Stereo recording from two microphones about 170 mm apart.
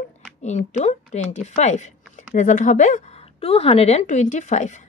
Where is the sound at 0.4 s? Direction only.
45° left (ahead or behind).